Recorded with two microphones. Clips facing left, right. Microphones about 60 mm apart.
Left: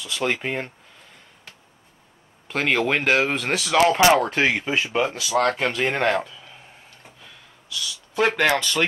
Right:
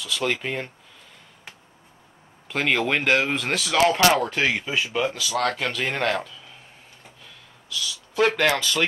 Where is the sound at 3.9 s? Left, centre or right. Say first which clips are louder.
Left 3 dB; centre.